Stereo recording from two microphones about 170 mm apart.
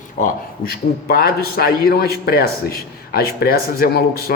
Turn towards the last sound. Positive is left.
turn(degrees=65)  # may be behind; listen again after turning